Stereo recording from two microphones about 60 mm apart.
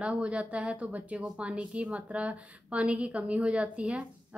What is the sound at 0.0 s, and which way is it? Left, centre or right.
A woman's voice, right.